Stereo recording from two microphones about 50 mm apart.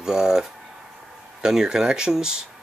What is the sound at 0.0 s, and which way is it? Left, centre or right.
Speech, centre.